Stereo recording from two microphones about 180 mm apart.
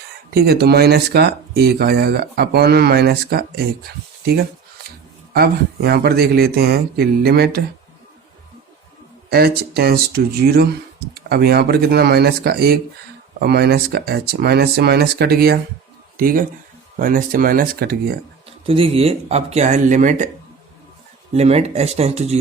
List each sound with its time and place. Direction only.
0.3 s speech: 60° right (ahead or behind)
5.3 s speech: 60° right (ahead or behind)
9.3 s speech: 60° right (ahead or behind)
18.6 s speech: 30° right (ahead or behind)
21.3 s speech: 35° right (ahead or behind)